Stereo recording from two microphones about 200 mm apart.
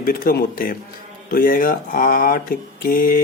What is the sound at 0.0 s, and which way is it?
Speech, 45° left (ahead or behind).